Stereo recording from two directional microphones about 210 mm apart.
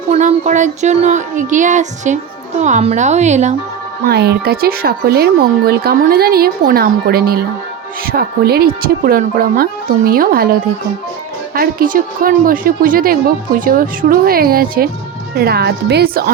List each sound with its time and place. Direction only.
0.1 s music: 35° right (ahead or behind)
4.0 s speech: 50° right (ahead or behind)